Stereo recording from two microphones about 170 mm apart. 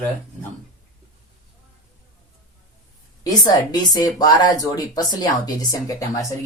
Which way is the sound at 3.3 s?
20° left (ahead or behind).